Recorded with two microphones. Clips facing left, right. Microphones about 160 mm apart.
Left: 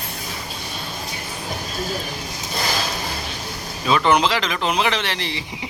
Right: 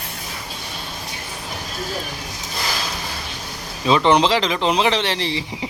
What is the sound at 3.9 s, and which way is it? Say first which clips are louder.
Speech: right 2 dB; 25° right (ahead or behind).